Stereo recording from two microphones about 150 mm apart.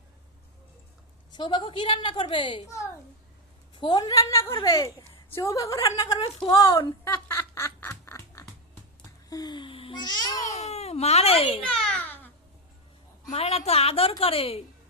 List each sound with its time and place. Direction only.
1.3 s a woman's voice: 30° left (ahead or behind)
3.8 s a woman's voice: 30° left (ahead or behind)
7.1 s duck: 15° left (ahead or behind)
9.3 s babbling: 30° left (ahead or behind)
10.5 s speech: 45° left (ahead or behind)
11.8 s babbling: 5° left (ahead or behind)
13.3 s a woman's voice: 45° left (ahead or behind)